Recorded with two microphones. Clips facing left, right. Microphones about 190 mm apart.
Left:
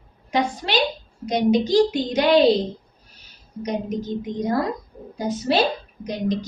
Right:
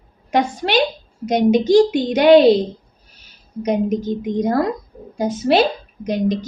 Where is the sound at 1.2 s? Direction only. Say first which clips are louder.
Right 4 dB; 50° right (ahead or behind).